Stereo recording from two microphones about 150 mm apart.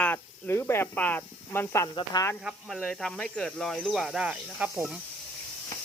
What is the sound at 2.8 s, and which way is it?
Speech, 5° left (ahead or behind).